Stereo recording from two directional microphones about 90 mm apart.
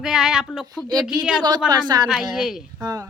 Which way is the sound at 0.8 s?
40° left (ahead or behind).